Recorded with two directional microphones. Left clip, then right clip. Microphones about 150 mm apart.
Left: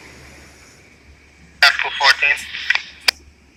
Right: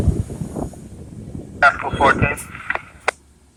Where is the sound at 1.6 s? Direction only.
25° right (ahead or behind).